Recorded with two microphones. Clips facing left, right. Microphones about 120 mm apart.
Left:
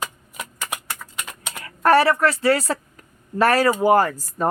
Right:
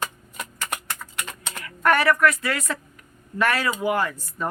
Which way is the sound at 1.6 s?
30° left (ahead or behind).